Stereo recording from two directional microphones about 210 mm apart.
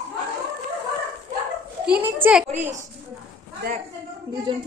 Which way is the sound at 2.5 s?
35° right (ahead or behind).